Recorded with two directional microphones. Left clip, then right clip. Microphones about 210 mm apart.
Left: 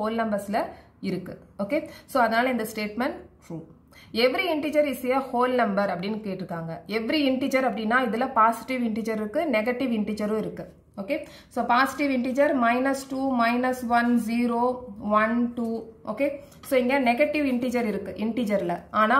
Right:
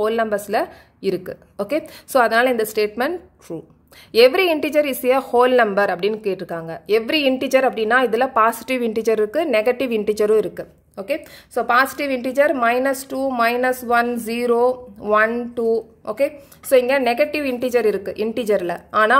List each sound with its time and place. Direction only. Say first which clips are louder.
0.0 s speech: right 7 dB; 40° right (ahead or behind)
16.7 s speech: right 7 dB; 45° right (ahead or behind)